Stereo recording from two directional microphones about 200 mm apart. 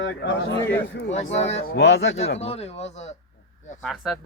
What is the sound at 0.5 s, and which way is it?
Speech, 10° left (ahead or behind).